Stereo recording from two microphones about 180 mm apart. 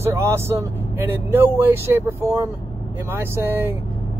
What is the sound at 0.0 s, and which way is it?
Speech, 15° right (ahead or behind).